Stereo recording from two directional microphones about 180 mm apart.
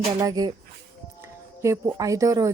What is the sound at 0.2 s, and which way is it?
Speech, 20° right (ahead or behind).